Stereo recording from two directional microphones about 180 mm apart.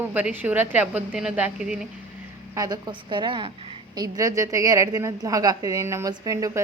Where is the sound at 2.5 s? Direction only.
20° right (ahead or behind).